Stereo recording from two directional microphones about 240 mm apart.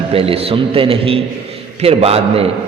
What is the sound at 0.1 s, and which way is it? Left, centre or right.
A man's voice, right.